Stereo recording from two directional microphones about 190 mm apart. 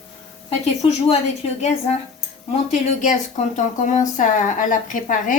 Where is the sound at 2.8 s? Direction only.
35° left (ahead or behind).